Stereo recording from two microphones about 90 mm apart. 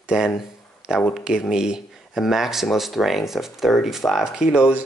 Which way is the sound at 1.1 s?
5° right (ahead or behind).